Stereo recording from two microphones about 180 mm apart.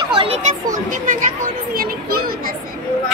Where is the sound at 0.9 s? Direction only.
45° right (ahead or behind).